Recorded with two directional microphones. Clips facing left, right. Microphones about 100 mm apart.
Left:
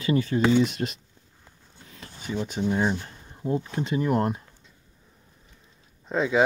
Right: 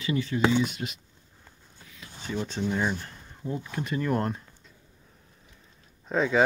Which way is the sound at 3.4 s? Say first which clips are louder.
Left 5 dB; 25° left (ahead or behind).